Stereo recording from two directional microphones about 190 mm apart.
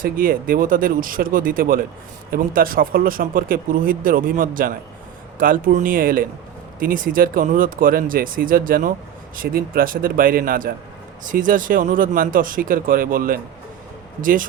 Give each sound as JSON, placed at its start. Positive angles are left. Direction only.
{"t": 0.0, "sound": "speech", "side_deg": -50}